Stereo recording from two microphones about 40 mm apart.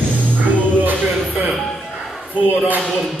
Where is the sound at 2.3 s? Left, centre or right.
Right.